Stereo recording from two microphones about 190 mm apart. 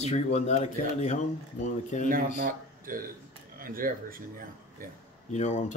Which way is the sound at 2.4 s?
50° right (ahead or behind).